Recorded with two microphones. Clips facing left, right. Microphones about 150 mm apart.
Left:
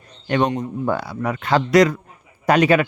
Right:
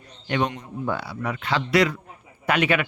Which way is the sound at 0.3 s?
45° left (ahead or behind).